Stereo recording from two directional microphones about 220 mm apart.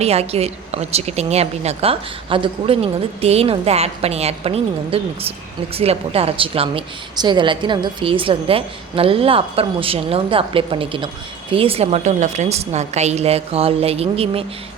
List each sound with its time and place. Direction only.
0.0 s a woman's voice: 30° right (ahead or behind)